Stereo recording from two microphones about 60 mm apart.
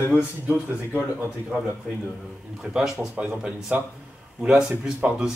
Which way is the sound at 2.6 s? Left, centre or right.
Centre.